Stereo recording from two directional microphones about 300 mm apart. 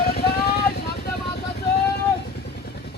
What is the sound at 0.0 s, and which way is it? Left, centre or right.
Vehicle, left.